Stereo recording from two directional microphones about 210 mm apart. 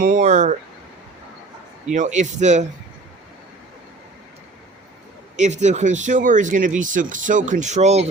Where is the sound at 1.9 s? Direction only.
35° right (ahead or behind).